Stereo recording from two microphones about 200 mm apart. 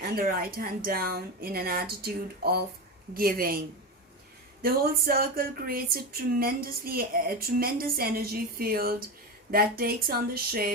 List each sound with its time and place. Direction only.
0.0 s speech: 45° right (ahead or behind)
4.6 s speech: 50° right (ahead or behind)